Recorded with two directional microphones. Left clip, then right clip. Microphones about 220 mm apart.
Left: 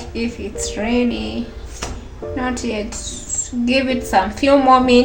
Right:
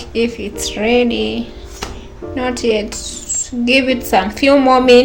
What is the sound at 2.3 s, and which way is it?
A woman's voice, 45° right (ahead or behind).